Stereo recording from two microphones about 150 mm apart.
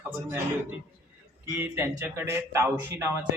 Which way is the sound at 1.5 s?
15° right (ahead or behind).